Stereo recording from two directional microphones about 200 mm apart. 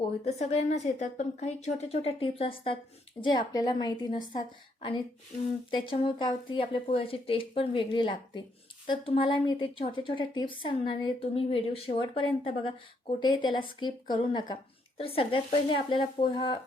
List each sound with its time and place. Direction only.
0.3 s a woman's voice: 35° left (ahead or behind)